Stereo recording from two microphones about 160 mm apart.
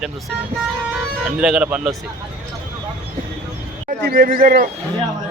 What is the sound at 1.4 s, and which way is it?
Speech, 5° right (ahead or behind).